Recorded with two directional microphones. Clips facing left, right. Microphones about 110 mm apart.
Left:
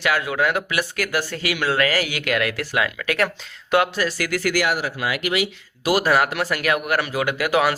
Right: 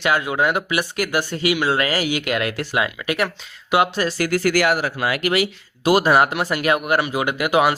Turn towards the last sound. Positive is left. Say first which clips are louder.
# right 2 dB
turn(degrees=-20)  # may be behind; listen again after turning